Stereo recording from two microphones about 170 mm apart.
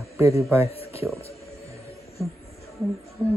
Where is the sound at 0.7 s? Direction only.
35° left (ahead or behind).